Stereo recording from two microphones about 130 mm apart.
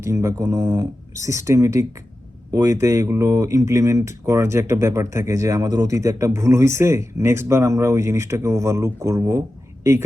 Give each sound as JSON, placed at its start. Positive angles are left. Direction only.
{"t": 0.0, "sound": "speech", "side_deg": -25}